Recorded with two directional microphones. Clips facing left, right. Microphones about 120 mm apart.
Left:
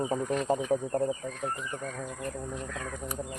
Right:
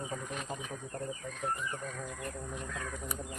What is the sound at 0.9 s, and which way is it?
Speech, 90° left.